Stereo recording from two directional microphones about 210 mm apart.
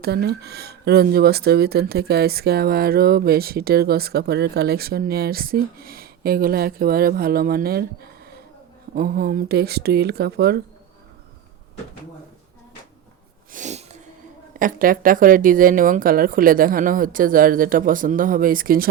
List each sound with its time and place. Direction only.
0.0 s speech: 50° right (ahead or behind)
9.0 s speech: 45° right (ahead or behind)
13.5 s sneeze: 35° right (ahead or behind)
14.6 s speech: 40° right (ahead or behind)